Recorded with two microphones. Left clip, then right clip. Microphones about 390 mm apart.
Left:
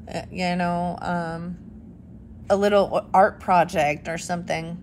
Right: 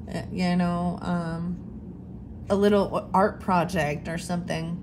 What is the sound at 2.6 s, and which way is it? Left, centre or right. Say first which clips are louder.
A woman's voice: left 2 dB; centre.